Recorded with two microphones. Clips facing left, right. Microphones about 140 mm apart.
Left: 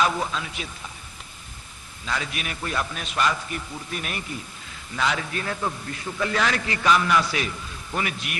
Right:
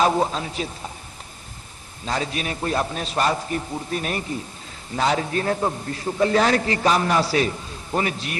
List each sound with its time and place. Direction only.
0.0 s a man's voice: 35° right (ahead or behind)
2.0 s a man's voice: 35° right (ahead or behind)